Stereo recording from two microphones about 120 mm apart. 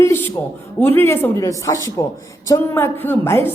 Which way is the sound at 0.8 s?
15° left (ahead or behind).